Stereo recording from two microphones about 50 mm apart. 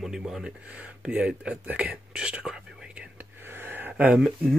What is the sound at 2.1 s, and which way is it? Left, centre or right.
Whispering, centre.